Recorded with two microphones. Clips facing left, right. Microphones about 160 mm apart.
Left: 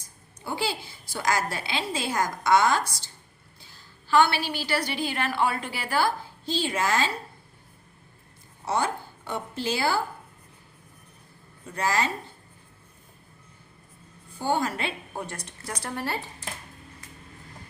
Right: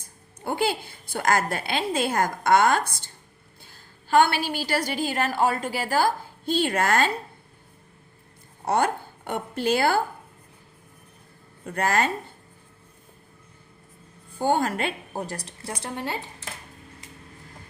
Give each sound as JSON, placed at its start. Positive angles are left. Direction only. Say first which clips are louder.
{"t": 0.4, "sound": "a woman's voice", "louder": "right 5 dB", "side_deg": -55}
{"t": 8.6, "sound": "a woman's voice", "louder": "right 4 dB", "side_deg": -55}
{"t": 11.6, "sound": "speech", "louder": "right 3 dB", "side_deg": -55}
{"t": 14.3, "sound": "a woman's voice", "louder": "right 3 dB", "side_deg": -50}